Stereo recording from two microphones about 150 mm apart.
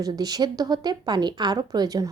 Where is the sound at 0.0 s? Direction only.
25° right (ahead or behind).